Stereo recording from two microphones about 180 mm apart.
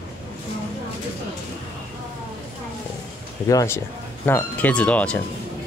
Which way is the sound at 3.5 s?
20° left (ahead or behind).